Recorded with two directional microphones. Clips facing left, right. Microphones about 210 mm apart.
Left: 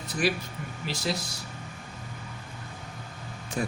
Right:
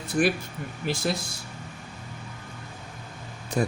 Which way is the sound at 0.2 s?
50° right (ahead or behind).